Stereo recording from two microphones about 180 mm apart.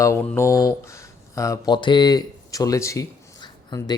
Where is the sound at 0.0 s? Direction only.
15° left (ahead or behind).